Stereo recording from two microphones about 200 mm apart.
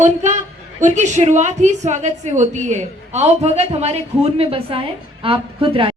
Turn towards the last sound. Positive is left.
turn(degrees=-25)  # may be behind; listen again after turning